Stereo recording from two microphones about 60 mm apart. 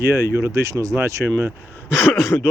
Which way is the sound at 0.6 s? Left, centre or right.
Right.